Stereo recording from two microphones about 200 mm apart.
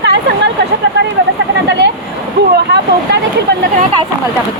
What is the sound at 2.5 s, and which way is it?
Speech, 55° right (ahead or behind).